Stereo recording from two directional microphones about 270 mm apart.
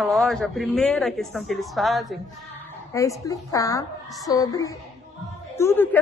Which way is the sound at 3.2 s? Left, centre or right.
Centre.